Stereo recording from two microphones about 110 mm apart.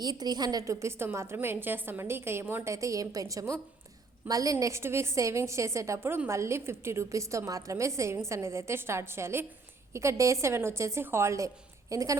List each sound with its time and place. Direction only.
0.0 s a woman's voice: 40° right (ahead or behind)